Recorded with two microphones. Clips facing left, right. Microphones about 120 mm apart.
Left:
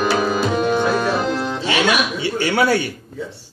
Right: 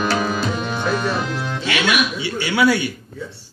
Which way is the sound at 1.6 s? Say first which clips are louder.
Left 2 dB; 30° left (ahead or behind).